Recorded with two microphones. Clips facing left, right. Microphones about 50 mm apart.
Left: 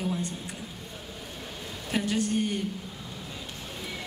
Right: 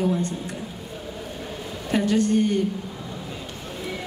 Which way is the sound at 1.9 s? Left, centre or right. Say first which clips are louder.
Right 7 dB; centre.